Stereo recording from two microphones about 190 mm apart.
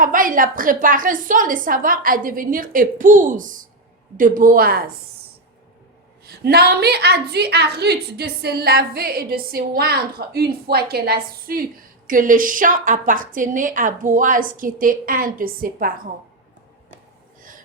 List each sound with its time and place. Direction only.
0.0 s a woman's voice: 45° right (ahead or behind)
6.2 s a woman's voice: 60° right (ahead or behind)